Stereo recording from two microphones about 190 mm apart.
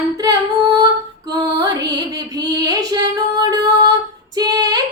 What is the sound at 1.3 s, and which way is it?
Music, 20° right (ahead or behind).